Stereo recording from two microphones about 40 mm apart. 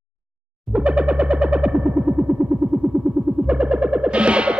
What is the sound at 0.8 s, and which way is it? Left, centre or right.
Music, right.